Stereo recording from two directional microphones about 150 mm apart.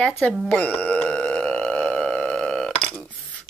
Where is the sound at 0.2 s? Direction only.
Centre (ahead or behind).